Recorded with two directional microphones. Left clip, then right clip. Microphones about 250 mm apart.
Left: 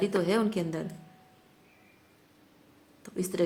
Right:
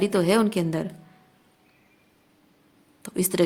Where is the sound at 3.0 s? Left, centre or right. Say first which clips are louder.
Right 7 dB; right.